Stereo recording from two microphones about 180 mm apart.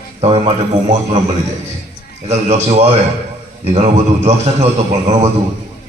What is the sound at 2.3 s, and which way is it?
A man's voice, 40° right (ahead or behind).